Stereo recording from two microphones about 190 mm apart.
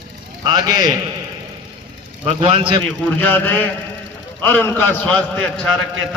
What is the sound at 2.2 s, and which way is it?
Speech, 30° right (ahead or behind).